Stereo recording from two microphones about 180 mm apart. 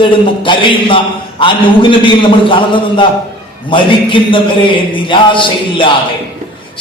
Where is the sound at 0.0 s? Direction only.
25° left (ahead or behind).